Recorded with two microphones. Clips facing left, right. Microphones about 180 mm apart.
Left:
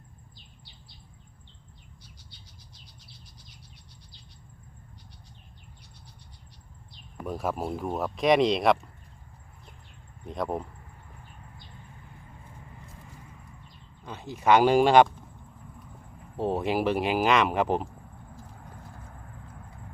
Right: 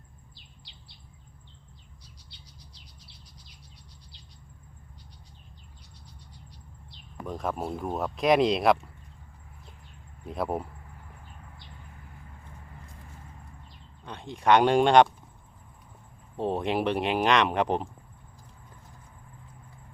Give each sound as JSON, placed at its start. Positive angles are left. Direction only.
{"t": 7.3, "sound": "speech", "side_deg": 5}
{"t": 10.2, "sound": "speech", "side_deg": -5}
{"t": 14.0, "sound": "speech", "side_deg": 5}
{"t": 16.4, "sound": "speech", "side_deg": 0}
{"t": 18.5, "sound": "vehicle", "side_deg": 75}